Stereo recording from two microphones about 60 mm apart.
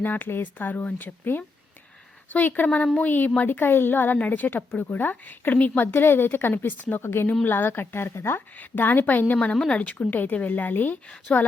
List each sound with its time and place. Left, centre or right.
0.0 s a woman's voice: left
7.0 s a woman's voice: left
8.5 s a woman's voice: left